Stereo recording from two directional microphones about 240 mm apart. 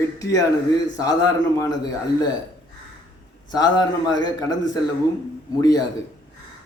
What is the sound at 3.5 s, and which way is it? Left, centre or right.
A man's voice, centre.